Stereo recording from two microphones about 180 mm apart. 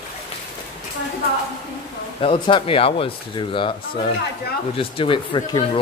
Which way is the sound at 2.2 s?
30° left (ahead or behind).